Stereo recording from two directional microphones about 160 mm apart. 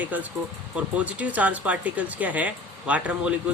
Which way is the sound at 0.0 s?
10° right (ahead or behind).